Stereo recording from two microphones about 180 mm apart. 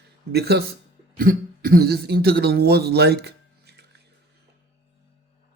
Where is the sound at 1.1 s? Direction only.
50° right (ahead or behind).